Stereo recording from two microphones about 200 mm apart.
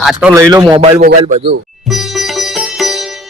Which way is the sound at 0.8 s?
35° right (ahead or behind).